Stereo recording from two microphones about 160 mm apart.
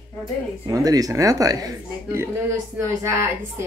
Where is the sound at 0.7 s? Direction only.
20° right (ahead or behind).